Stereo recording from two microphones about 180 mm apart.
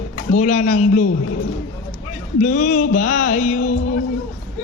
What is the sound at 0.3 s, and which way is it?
Speech, 40° left (ahead or behind).